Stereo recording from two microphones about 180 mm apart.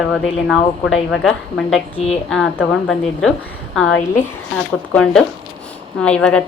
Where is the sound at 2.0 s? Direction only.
35° left (ahead or behind).